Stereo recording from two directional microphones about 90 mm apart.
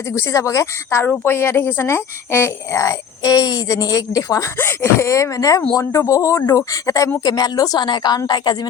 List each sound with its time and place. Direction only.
0.1 s speech: 35° left (ahead or behind)
4.5 s a woman's voice: 25° left (ahead or behind); by 8.2 s 50° left (ahead or behind)